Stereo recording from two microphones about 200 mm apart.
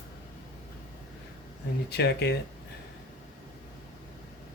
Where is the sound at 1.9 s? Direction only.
55° left (ahead or behind).